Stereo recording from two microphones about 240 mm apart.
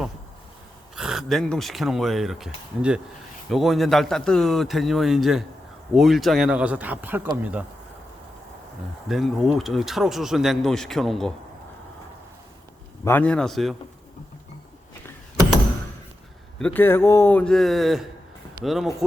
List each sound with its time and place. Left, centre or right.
0.9 s speech: centre
9.0 s speech: centre
13.1 s speech: centre
16.6 s speech: centre